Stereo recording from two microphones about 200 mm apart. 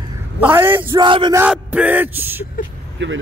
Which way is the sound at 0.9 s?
25° right (ahead or behind).